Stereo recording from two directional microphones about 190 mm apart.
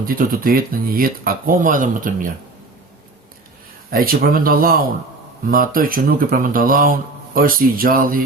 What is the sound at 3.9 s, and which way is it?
Speech, 50° right (ahead or behind).